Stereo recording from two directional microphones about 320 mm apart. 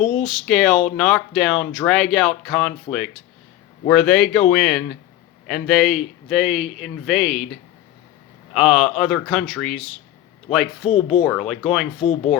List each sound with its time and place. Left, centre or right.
0.2 s a man's voice: centre
12.0 s speech: centre